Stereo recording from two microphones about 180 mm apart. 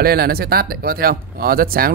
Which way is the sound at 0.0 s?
60° right (ahead or behind).